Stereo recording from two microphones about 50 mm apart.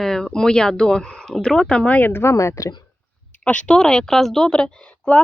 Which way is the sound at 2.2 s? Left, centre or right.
Left.